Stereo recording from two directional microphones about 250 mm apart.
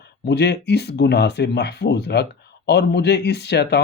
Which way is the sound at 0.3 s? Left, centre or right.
Left.